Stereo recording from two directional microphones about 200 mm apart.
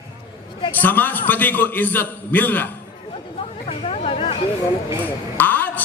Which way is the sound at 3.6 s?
30° left (ahead or behind).